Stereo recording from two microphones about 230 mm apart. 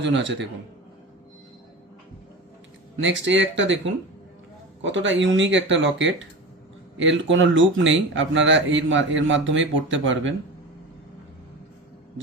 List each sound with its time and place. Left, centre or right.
0.0 s speech: right
3.0 s speech: right